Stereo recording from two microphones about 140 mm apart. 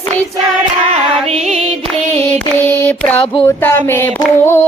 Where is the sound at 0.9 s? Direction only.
45° right (ahead or behind).